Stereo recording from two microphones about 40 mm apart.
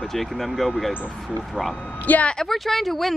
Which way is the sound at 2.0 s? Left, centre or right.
Left.